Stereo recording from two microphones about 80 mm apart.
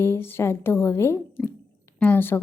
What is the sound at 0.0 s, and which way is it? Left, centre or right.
A woman's voice, left.